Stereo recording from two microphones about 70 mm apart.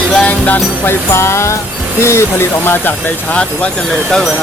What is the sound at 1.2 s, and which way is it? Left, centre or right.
Speech, left.